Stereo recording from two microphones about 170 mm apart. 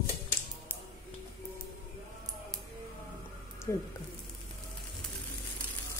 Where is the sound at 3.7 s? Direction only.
15° left (ahead or behind).